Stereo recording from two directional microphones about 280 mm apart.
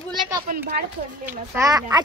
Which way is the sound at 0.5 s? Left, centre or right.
Right.